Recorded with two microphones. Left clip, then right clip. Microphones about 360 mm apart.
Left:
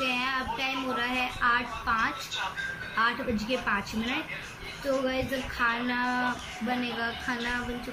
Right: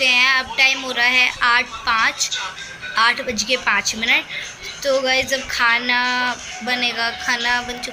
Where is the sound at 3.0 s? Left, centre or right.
Right.